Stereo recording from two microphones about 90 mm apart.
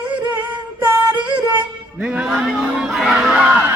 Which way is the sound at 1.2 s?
15° right (ahead or behind).